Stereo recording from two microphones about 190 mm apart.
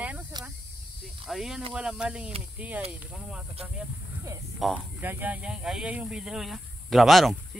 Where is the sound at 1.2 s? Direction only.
Centre (ahead or behind).